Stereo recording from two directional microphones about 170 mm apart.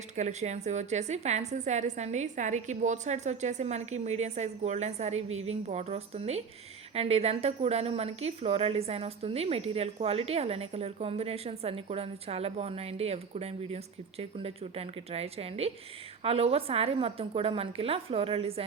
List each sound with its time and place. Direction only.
0.2 s a woman's voice: 40° right (ahead or behind)